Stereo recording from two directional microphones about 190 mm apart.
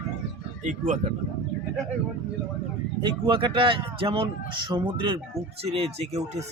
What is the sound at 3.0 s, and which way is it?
Speech, 25° right (ahead or behind).